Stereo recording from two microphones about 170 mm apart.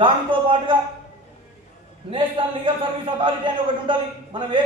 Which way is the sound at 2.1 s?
30° right (ahead or behind).